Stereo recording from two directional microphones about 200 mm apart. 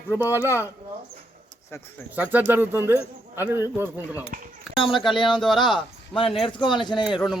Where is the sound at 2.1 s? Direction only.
10° right (ahead or behind).